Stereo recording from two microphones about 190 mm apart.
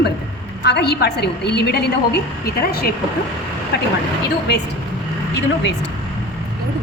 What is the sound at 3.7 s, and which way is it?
Speech, 60° left (ahead or behind).